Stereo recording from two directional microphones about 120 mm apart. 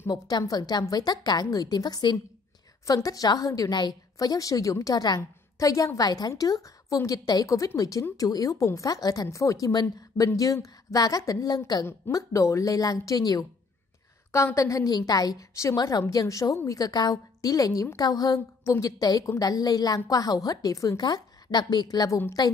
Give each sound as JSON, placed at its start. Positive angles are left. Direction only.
{"t": 0.1, "sound": "a woman's voice", "side_deg": 30}